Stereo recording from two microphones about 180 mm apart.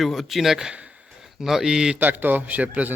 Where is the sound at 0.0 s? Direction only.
Centre (ahead or behind).